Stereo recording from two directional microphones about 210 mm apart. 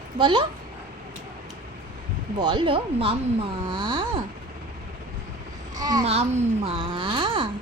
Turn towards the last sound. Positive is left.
turn(degrees=-25)  # may be behind; listen again after turning